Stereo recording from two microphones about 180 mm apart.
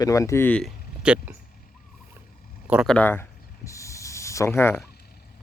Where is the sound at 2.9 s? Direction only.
10° left (ahead or behind).